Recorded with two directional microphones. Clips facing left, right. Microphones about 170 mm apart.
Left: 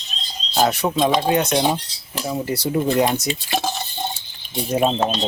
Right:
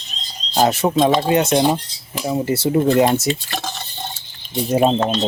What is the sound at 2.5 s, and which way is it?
Speech, 25° right (ahead or behind).